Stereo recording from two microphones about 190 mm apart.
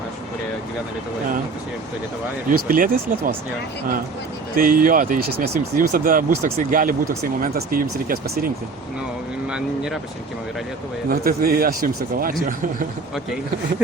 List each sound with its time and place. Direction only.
2.5 s speech: 45° right (ahead or behind)
4.5 s speech: 45° right (ahead or behind)
9.5 s speech: 5° right (ahead or behind)
11.1 s speech: 50° right (ahead or behind)